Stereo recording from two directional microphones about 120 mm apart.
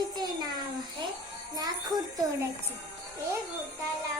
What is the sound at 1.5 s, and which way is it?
Speech, 35° right (ahead or behind).